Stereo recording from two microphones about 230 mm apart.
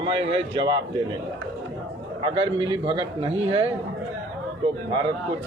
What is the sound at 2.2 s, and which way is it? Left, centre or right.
A man's voice, right.